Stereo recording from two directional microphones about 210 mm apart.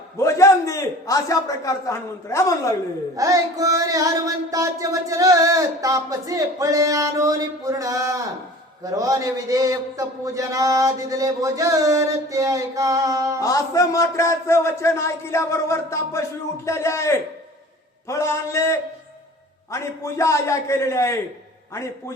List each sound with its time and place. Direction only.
0.2 s a man's voice: 15° left (ahead or behind)
3.2 s music: 15° right (ahead or behind)
13.4 s a man's voice: 15° left (ahead or behind)